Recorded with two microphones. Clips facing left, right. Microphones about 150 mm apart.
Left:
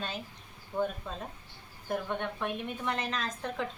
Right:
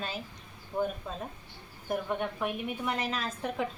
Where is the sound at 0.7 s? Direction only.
15° right (ahead or behind).